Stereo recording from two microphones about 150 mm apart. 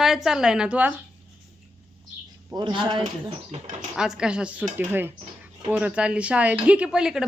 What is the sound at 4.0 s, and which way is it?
A woman's voice, 5° right (ahead or behind).